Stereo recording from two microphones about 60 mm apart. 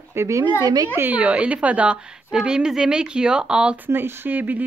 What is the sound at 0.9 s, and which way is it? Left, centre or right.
A woman's voice, right.